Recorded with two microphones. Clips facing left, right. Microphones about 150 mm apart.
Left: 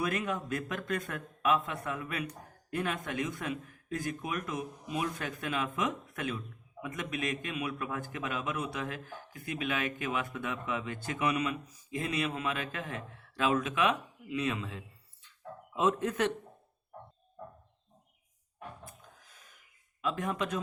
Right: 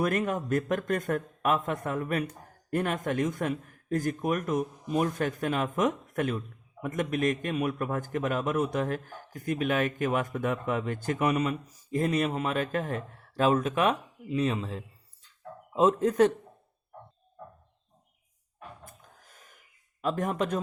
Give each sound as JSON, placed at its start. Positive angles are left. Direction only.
{"t": 0.0, "sound": "a man's voice", "side_deg": -50}
{"t": 18.9, "sound": "gasp", "side_deg": -50}